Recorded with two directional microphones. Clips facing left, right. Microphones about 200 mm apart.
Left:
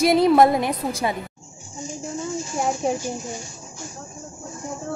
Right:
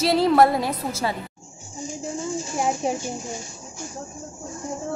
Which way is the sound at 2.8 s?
Centre (ahead or behind).